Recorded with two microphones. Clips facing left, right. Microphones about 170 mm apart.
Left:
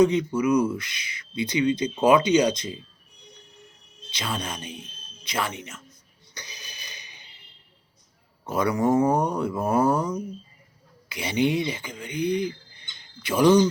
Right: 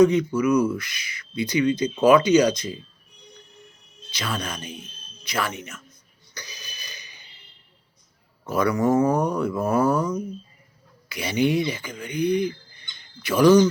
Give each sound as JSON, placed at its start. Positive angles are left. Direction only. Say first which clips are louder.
{"t": 0.0, "sound": "speech", "louder": "right 2 dB", "side_deg": 25}
{"t": 4.1, "sound": "speech", "louder": "right 1 dB", "side_deg": 25}
{"t": 6.3, "sound": "burping", "louder": "right 2 dB", "side_deg": 25}
{"t": 8.4, "sound": "speech", "louder": "right 1 dB", "side_deg": 25}
{"t": 9.1, "sound": "speech", "louder": "right 1 dB", "side_deg": 25}
{"t": 11.1, "sound": "speech", "louder": "right 2 dB", "side_deg": 25}